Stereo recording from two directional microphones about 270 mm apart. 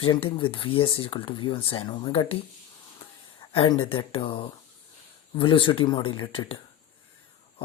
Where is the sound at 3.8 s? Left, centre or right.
Centre.